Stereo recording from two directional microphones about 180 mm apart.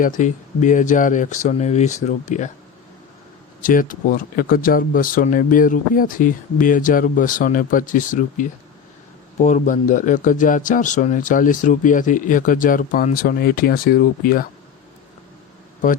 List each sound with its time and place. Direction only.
0.0 s a man's voice: 45° left (ahead or behind)
3.6 s a man's voice: 50° left (ahead or behind)
15.8 s a man's voice: 45° left (ahead or behind)